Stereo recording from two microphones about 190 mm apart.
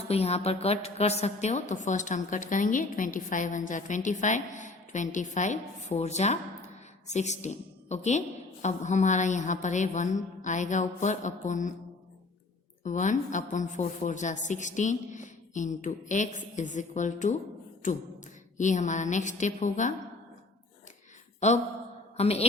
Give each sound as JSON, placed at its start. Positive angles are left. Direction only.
{"t": 0.1, "sound": "a woman's voice", "side_deg": 35}
{"t": 12.8, "sound": "a woman's voice", "side_deg": 40}
{"t": 21.4, "sound": "a woman's voice", "side_deg": 35}